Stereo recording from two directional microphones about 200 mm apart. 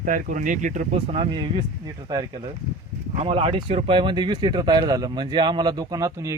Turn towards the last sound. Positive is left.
turn(degrees=-15)  # may be behind; listen again after turning